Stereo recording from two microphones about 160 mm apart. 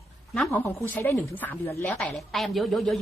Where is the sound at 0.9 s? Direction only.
15° left (ahead or behind).